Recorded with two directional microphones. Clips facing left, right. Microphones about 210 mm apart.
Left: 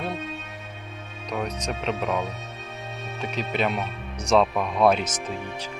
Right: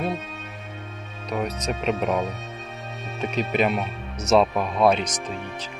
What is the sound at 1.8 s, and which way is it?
Speech, 15° right (ahead or behind).